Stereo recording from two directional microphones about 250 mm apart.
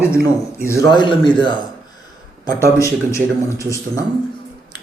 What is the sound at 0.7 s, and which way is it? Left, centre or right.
Speech, centre.